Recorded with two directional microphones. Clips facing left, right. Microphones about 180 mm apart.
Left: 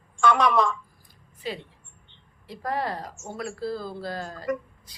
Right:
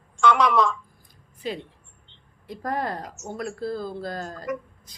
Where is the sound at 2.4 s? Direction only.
50° right (ahead or behind).